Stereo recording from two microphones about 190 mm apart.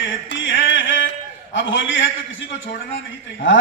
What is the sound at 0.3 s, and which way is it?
Music, 75° left (ahead or behind).